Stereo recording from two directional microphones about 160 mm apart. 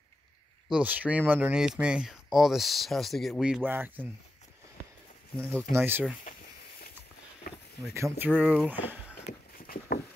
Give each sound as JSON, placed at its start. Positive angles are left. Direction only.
{"t": 0.7, "sound": "speech", "side_deg": -10}
{"t": 5.4, "sound": "speech", "side_deg": 5}
{"t": 5.7, "sound": "speech", "side_deg": -15}
{"t": 7.5, "sound": "a sound", "side_deg": 70}
{"t": 7.9, "sound": "speech", "side_deg": -15}
{"t": 9.6, "sound": "a sound", "side_deg": 65}